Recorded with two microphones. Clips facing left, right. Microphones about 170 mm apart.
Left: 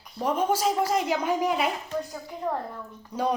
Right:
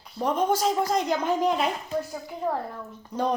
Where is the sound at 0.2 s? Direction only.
10° left (ahead or behind).